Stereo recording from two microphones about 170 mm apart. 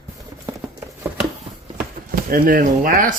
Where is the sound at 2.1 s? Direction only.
60° right (ahead or behind).